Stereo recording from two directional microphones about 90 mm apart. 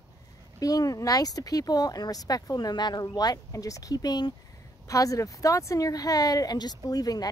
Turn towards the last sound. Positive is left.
turn(degrees=45)  # may be behind; listen again after turning